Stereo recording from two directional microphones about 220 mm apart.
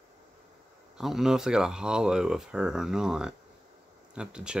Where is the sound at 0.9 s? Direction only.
Centre (ahead or behind).